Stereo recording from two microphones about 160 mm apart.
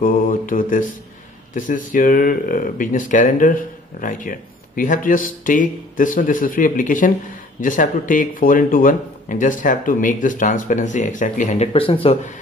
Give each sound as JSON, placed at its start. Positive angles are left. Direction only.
{"t": 0.0, "sound": "mantra", "side_deg": 60}
{"t": 1.5, "sound": "speech", "side_deg": 55}